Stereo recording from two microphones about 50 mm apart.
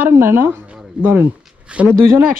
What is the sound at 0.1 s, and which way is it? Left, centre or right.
Speech, right.